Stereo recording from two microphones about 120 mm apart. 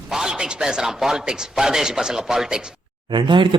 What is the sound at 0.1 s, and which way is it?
Speech, 5° right (ahead or behind).